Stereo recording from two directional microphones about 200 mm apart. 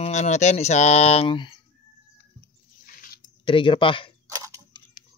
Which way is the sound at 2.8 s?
45° left (ahead or behind).